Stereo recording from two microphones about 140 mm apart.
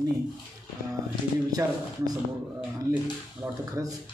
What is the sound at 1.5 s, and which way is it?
Speech, 30° right (ahead or behind).